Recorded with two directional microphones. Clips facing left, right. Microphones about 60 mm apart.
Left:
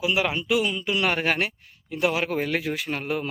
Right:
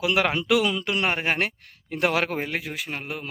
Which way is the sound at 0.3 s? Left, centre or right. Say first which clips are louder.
Right 2 dB; right.